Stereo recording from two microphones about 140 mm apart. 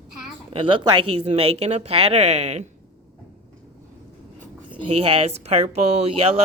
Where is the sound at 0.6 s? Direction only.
35° right (ahead or behind).